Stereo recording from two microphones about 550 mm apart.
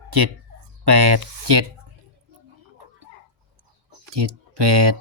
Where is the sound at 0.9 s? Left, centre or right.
Right.